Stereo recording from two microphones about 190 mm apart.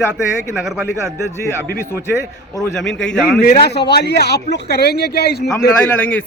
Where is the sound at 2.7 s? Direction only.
5° left (ahead or behind).